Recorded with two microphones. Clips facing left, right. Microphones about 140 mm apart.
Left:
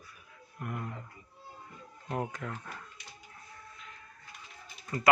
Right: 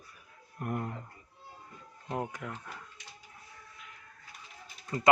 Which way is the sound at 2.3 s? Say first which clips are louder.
Left 1 dB; 15° right (ahead or behind).